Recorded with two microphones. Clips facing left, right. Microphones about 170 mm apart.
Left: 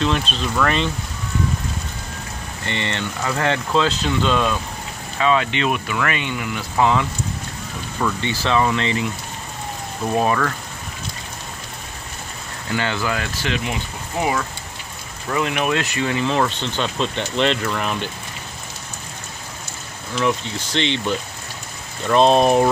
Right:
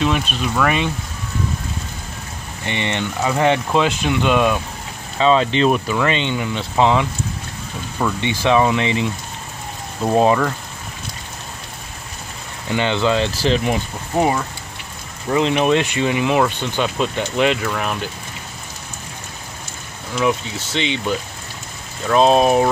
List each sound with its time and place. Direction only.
0.0 s speech: 10° right (ahead or behind)
2.6 s speech: 15° right (ahead or behind)
5.2 s speech: 30° right (ahead or behind)
10.1 s speech: 20° right (ahead or behind)
12.6 s speech: 20° right (ahead or behind)
15.2 s speech: 25° right (ahead or behind); by 18.1 s 5° right (ahead or behind)
20.2 s speech: 5° right (ahead or behind)